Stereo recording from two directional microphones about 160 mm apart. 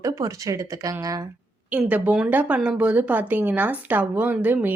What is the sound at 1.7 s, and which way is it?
Speech, 10° right (ahead or behind).